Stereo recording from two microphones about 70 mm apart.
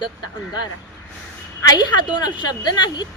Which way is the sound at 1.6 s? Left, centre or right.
Left.